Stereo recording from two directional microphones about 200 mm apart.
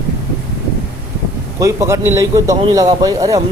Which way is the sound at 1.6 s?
15° right (ahead or behind).